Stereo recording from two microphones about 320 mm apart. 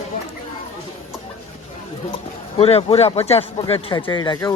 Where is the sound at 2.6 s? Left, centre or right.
Centre.